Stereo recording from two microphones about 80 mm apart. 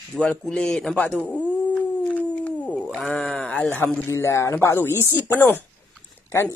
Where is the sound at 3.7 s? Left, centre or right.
Left.